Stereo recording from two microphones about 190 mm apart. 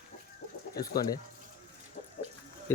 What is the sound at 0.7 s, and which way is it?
Speech, 20° left (ahead or behind).